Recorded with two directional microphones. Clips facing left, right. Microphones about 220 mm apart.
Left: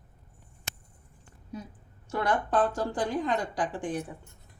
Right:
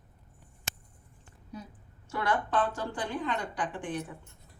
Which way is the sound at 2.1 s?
40° left (ahead or behind).